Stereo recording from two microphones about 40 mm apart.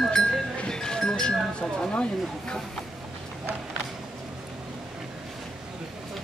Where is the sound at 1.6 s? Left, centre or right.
Left.